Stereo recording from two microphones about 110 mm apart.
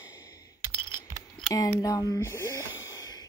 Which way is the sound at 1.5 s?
30° left (ahead or behind).